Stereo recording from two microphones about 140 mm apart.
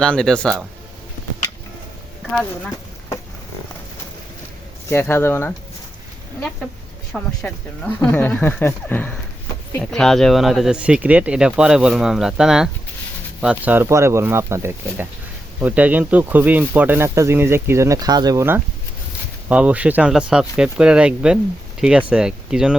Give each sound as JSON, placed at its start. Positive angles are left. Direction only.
{"t": 0.0, "sound": "speech", "side_deg": 5}
{"t": 4.9, "sound": "speech", "side_deg": 15}
{"t": 7.4, "sound": "speech", "side_deg": 10}
{"t": 9.9, "sound": "speech", "side_deg": 5}
{"t": 13.8, "sound": "speech", "side_deg": -20}